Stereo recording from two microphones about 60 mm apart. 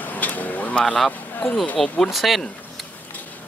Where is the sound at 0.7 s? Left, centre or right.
Centre.